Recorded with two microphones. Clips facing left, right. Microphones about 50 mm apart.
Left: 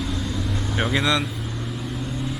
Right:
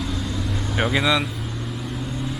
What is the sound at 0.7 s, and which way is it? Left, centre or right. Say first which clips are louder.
Speech: right 2 dB; centre.